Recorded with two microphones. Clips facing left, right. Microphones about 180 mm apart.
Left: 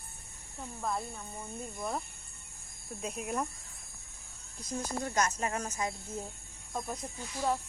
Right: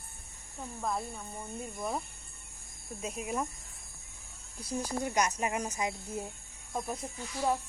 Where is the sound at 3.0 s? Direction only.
Centre (ahead or behind).